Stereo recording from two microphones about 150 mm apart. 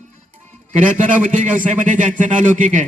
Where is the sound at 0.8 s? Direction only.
60° right (ahead or behind).